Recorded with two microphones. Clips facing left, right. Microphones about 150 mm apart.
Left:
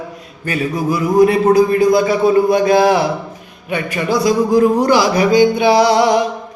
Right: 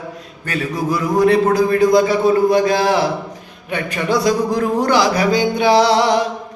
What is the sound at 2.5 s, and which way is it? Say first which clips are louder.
Speech: left 3 dB; 15° left (ahead or behind).